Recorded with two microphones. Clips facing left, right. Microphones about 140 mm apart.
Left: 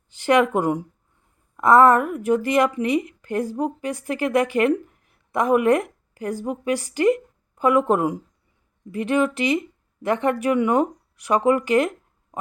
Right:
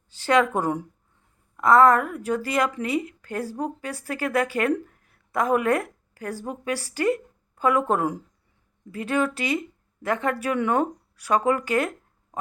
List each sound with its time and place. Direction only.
0.1 s a woman's voice: 20° left (ahead or behind)